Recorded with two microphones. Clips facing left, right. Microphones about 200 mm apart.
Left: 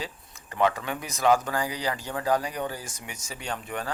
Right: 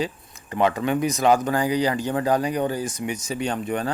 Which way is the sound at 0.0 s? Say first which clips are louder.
Right 9 dB; 20° right (ahead or behind).